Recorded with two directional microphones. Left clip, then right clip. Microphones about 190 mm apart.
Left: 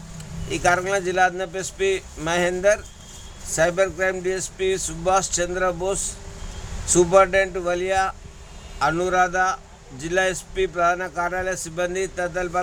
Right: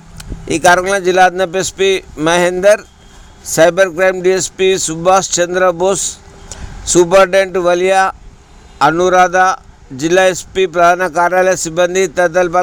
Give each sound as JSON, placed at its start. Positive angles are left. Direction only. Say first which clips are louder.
{"t": 0.2, "sound": "a man's voice", "louder": "right 11 dB", "side_deg": -50}